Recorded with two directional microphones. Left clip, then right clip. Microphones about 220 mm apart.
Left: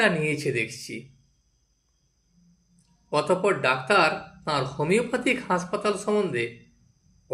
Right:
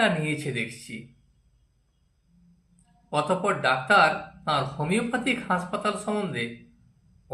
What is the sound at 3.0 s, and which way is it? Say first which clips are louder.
Speech: left 2 dB; 25° left (ahead or behind).